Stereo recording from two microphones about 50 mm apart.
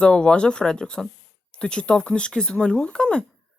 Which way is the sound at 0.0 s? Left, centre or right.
Centre.